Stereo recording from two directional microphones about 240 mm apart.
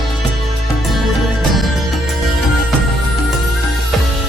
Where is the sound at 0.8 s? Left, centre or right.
Centre.